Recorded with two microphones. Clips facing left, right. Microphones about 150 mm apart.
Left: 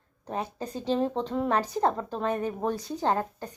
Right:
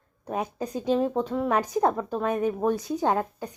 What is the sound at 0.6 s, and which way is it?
A woman's voice, 10° right (ahead or behind).